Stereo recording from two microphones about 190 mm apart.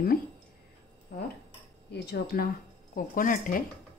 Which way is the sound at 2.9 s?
45° left (ahead or behind).